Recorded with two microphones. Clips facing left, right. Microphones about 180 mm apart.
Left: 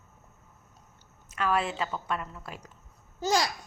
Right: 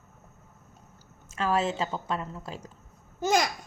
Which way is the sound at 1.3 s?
25° right (ahead or behind).